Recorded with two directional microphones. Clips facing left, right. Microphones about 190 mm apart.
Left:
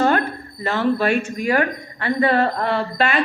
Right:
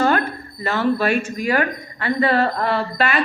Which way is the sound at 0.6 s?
25° left (ahead or behind).